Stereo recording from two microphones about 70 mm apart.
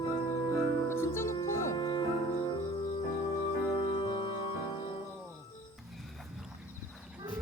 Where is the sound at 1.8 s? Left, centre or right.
Left.